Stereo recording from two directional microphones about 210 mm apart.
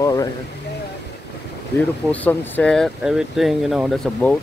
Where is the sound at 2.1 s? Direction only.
5° left (ahead or behind).